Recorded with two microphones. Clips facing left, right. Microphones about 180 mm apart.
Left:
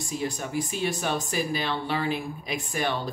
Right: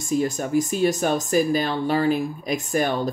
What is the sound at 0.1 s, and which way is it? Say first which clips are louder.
A woman's voice: right 9 dB; 45° right (ahead or behind).